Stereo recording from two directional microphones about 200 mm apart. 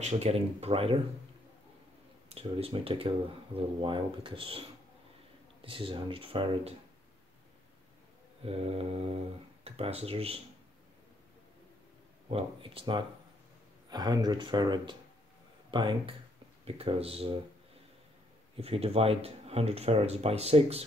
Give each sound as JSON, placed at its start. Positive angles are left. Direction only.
{"t": 0.0, "sound": "speech", "side_deg": -35}
{"t": 2.2, "sound": "speech", "side_deg": -30}
{"t": 8.4, "sound": "speech", "side_deg": -30}
{"t": 12.3, "sound": "speech", "side_deg": -25}
{"t": 18.6, "sound": "speech", "side_deg": -30}